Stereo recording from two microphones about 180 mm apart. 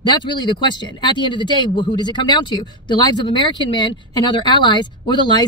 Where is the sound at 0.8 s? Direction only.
25° left (ahead or behind).